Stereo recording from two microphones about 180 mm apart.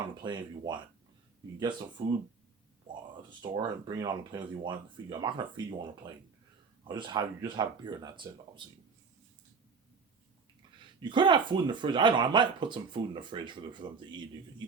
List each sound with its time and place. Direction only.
0.2 s speech: 25° right (ahead or behind)
2.0 s speech: 25° right (ahead or behind)
10.8 s speech: 25° right (ahead or behind)